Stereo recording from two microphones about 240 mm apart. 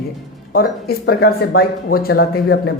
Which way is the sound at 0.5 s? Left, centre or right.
Left.